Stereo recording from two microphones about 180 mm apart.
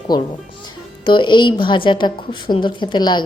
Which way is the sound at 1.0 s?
25° left (ahead or behind).